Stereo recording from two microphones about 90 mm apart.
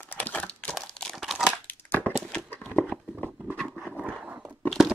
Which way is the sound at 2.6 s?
20° left (ahead or behind).